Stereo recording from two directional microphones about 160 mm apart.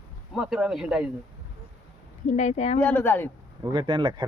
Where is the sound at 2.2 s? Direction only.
45° left (ahead or behind).